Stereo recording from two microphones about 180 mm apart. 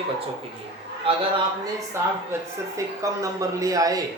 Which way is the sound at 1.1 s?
30° right (ahead or behind).